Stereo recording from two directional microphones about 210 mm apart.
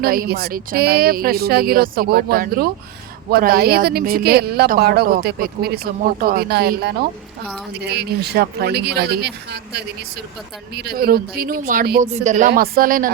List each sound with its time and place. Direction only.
0.0 s speech: 45° right (ahead or behind)